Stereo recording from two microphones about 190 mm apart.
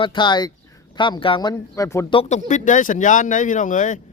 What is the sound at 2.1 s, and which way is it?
Speech, 40° left (ahead or behind).